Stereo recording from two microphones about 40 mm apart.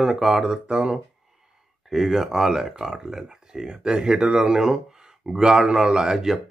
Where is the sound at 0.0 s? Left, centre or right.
Centre.